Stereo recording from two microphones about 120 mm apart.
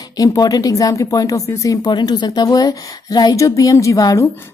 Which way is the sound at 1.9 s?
40° left (ahead or behind).